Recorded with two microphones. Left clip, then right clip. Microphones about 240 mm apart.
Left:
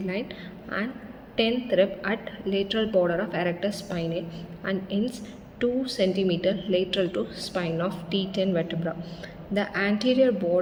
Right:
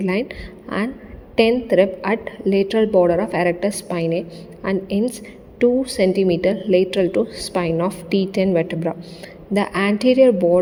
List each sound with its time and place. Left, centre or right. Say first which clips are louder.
0.0 s a woman's voice: right 9 dB; right